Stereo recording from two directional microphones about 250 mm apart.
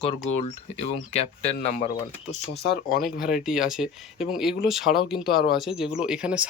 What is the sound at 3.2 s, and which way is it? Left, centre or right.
Speech, centre.